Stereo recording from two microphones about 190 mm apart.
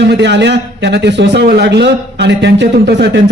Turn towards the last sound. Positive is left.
turn(degrees=-65)  # may be behind; listen again after turning